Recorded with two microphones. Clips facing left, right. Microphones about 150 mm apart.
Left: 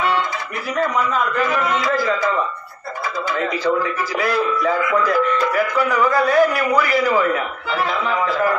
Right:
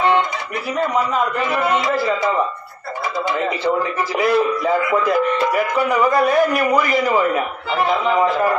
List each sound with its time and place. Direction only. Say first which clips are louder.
1.7 s speech: right 1 dB; 25° right (ahead or behind)
4.2 s speech: right 3 dB; 15° right (ahead or behind)